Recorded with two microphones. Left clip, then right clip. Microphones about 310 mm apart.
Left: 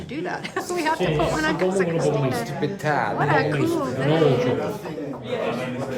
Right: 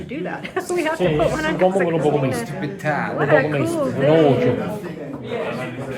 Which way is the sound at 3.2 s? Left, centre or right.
Centre.